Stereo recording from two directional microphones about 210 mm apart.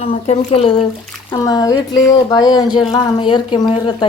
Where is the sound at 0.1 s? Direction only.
30° left (ahead or behind).